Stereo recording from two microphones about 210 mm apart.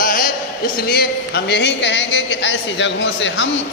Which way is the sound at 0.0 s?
40° left (ahead or behind).